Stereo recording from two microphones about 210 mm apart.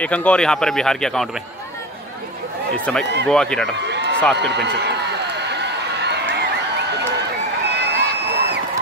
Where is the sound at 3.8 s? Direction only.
55° right (ahead or behind).